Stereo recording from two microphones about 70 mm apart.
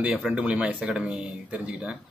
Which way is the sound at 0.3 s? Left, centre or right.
Centre.